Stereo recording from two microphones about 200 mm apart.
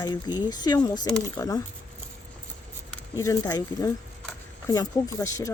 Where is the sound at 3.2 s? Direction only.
15° left (ahead or behind).